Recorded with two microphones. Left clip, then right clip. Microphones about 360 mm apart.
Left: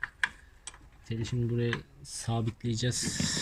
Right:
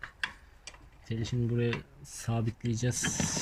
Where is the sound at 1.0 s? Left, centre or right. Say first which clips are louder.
Even; centre.